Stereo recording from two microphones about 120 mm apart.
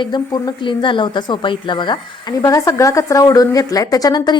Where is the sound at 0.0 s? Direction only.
40° left (ahead or behind).